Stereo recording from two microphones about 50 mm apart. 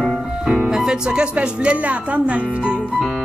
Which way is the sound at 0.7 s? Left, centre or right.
Centre.